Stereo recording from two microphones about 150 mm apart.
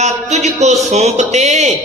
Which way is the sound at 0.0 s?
50° right (ahead or behind).